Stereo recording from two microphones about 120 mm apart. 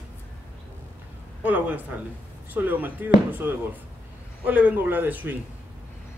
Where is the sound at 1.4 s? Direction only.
15° right (ahead or behind).